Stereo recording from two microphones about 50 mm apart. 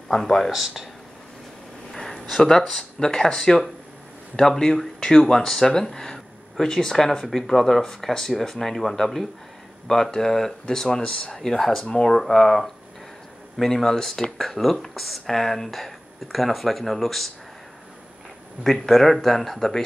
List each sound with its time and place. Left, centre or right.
0.1 s speech: centre
0.5 s speech: centre
1.9 s a sound: centre
2.5 s speech: centre
11.3 s speech: centre
18.6 s speech: centre